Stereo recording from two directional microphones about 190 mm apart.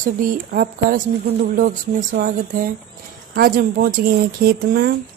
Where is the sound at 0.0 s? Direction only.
50° right (ahead or behind).